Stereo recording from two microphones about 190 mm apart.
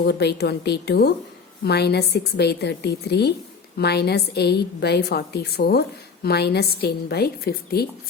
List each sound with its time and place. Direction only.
0.0 s a woman's voice: 60° left (ahead or behind)